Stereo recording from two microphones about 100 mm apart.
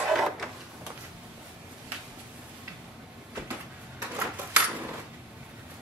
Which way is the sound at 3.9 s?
15° right (ahead or behind).